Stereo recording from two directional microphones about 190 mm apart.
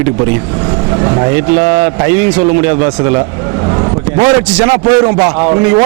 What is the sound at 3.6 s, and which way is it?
Vehicle, 25° right (ahead or behind).